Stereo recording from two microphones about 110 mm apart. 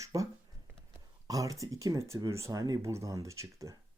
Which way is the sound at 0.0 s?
30° right (ahead or behind).